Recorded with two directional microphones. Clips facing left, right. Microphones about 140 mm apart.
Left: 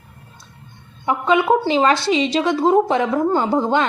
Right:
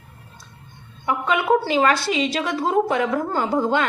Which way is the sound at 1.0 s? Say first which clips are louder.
Left 4 dB; 25° left (ahead or behind).